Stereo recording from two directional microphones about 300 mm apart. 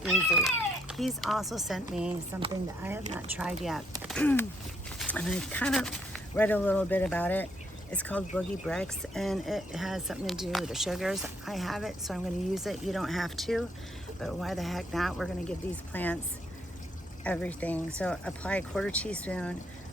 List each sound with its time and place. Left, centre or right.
0.0 s speech: centre
3.3 s speech: centre
17.2 s speech: centre